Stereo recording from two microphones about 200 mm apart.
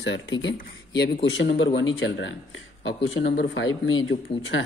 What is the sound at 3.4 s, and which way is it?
Speech, 70° left (ahead or behind).